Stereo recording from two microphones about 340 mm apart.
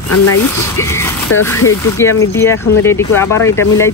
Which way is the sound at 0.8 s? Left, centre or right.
Centre.